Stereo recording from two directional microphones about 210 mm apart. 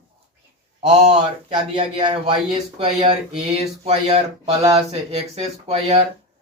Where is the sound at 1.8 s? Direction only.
25° right (ahead or behind).